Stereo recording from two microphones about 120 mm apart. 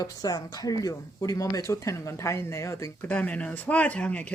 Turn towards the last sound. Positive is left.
turn(degrees=10)  # may be behind; listen again after turning